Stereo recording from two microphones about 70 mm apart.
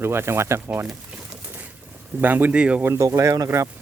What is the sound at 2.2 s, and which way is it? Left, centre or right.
Speech, right.